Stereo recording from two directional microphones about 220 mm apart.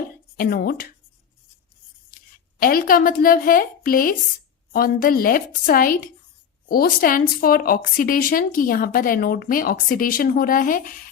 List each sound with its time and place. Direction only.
0.3 s speech: 40° left (ahead or behind)
2.6 s speech: 40° left (ahead or behind)